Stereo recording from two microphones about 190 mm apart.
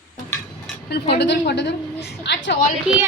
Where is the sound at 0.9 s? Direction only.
60° left (ahead or behind).